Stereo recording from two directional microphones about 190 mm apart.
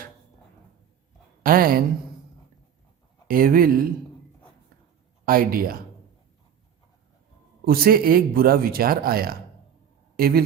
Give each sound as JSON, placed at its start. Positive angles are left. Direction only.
{"t": 1.5, "sound": "speech", "side_deg": -50}
{"t": 3.2, "sound": "speech", "side_deg": -50}
{"t": 5.2, "sound": "speech", "side_deg": -50}
{"t": 7.6, "sound": "speech", "side_deg": -50}